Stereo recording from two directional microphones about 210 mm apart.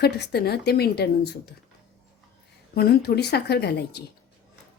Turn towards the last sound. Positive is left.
turn(degrees=50)  # may be behind; listen again after turning